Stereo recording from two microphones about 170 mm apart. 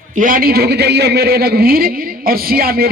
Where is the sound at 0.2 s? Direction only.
55° right (ahead or behind).